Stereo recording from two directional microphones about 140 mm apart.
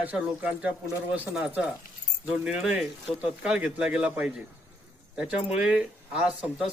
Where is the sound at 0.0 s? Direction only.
10° right (ahead or behind).